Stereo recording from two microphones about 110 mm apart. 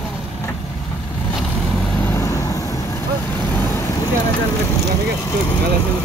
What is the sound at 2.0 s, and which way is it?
Vehicle, 25° left (ahead or behind).